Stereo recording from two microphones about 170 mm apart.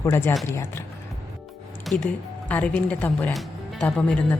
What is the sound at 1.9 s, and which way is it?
Speech, 10° left (ahead or behind).